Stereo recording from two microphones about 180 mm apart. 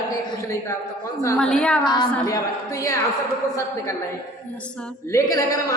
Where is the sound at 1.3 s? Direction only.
5° left (ahead or behind).